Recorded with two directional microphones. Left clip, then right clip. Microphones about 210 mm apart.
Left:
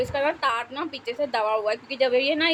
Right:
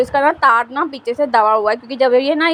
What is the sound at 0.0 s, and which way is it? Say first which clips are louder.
Speech: right 11 dB; 30° right (ahead or behind).